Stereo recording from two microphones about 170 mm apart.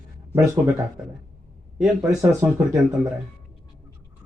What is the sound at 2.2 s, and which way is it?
Speech, 15° right (ahead or behind).